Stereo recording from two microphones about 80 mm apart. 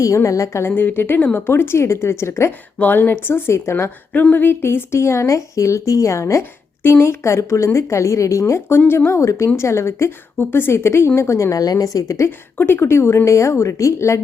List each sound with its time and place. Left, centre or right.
0.0 s speech: left
0.7 s speech: left
2.7 s speech: left
4.1 s speech: centre; by 12.3 s left
12.5 s speech: left